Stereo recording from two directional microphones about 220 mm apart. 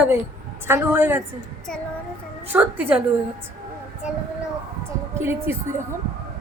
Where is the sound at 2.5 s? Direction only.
10° right (ahead or behind).